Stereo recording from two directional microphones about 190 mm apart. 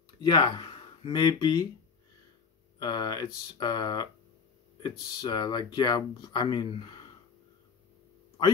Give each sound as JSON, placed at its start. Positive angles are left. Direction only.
{"t": 0.2, "sound": "speech", "side_deg": 25}
{"t": 2.8, "sound": "speech", "side_deg": 20}